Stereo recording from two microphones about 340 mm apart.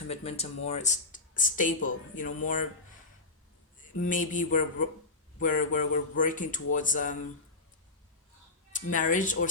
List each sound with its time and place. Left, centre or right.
0.1 s speech: centre
4.0 s speech: left
8.7 s speech: left